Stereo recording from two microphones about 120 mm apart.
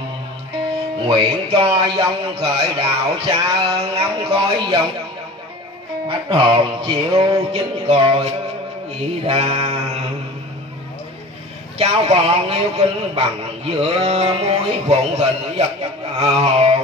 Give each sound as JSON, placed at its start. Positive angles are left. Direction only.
{"t": 1.0, "sound": "a man's voice", "side_deg": -50}
{"t": 6.0, "sound": "a man's voice", "side_deg": -45}
{"t": 9.2, "sound": "a man's voice", "side_deg": -55}
{"t": 11.8, "sound": "a man's voice", "side_deg": -55}